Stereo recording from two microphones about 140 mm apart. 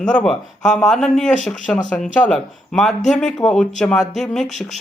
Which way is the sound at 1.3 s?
60° left (ahead or behind).